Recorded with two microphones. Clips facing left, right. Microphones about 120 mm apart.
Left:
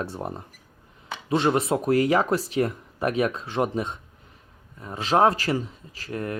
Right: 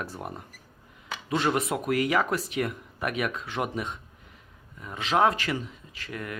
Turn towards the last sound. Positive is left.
turn(degrees=35)  # may be behind; listen again after turning